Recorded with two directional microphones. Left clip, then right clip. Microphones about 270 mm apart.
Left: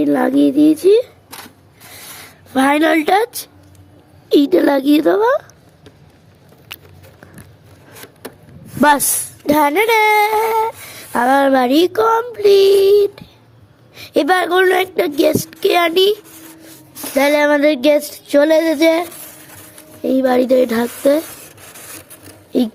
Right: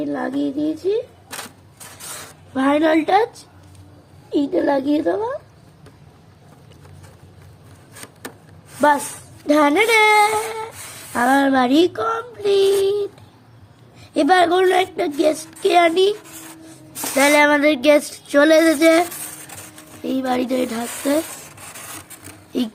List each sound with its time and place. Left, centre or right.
0.0 s speech: left
2.5 s speech: left
4.3 s a woman's voice: left
6.7 s a sound: left
9.5 s speech: left
17.2 s speech: centre